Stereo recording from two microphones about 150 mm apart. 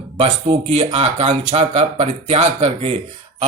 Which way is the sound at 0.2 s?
40° right (ahead or behind).